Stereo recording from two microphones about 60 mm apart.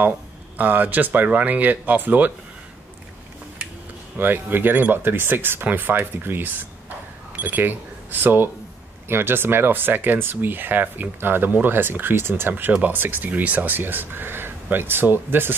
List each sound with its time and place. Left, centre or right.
0.6 s speech: right
4.2 s speech: right